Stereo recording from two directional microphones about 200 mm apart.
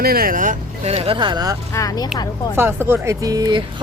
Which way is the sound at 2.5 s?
10° right (ahead or behind).